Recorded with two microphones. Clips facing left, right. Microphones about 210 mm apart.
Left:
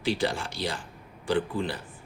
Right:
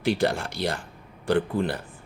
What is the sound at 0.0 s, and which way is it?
Speech, 60° right (ahead or behind).